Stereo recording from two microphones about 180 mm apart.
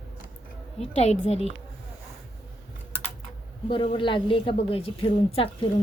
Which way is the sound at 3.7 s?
25° left (ahead or behind).